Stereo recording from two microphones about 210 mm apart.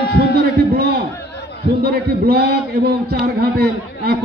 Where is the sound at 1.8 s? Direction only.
50° right (ahead or behind).